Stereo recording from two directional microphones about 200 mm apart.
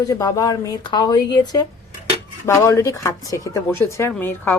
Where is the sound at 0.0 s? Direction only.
15° left (ahead or behind).